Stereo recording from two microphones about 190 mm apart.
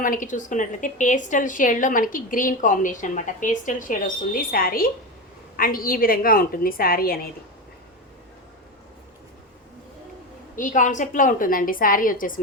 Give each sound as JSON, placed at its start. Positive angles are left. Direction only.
{"t": 0.0, "sound": "a woman's voice", "side_deg": 45}
{"t": 10.5, "sound": "a woman's voice", "side_deg": 45}